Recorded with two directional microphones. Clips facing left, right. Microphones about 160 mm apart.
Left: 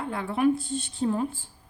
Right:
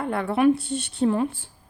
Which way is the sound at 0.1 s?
65° right (ahead or behind).